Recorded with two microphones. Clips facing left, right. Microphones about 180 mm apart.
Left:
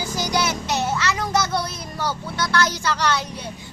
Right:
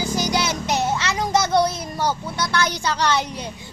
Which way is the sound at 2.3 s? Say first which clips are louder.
Left 1 dB; 20° right (ahead or behind).